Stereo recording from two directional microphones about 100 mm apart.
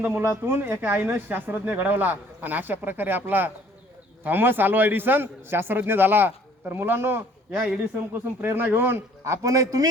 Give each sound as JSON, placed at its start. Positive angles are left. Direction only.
{"t": 0.0, "sound": "speech", "side_deg": -15}
{"t": 7.5, "sound": "speech", "side_deg": -10}
{"t": 8.4, "sound": "speech", "side_deg": -20}